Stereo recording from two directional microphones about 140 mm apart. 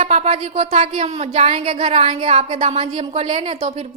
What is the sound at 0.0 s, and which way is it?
A woman's voice, 55° right (ahead or behind).